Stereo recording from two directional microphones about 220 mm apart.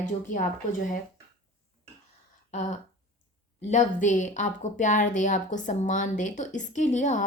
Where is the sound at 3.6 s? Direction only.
30° left (ahead or behind).